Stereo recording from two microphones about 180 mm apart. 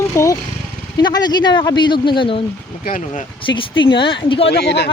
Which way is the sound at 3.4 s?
25° left (ahead or behind).